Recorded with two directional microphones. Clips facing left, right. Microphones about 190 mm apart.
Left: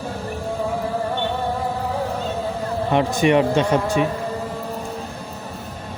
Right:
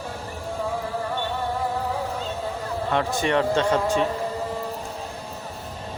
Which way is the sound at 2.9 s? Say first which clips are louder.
Left 6 dB; 15° left (ahead or behind).